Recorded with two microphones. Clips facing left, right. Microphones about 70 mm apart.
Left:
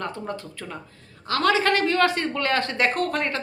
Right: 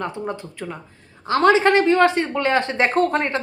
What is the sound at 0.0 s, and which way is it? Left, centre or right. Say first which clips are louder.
A woman's voice: right 4 dB; centre.